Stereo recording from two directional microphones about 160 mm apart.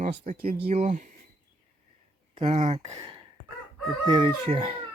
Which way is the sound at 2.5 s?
40° right (ahead or behind).